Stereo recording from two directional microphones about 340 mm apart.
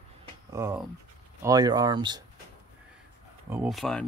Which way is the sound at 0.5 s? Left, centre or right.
Centre.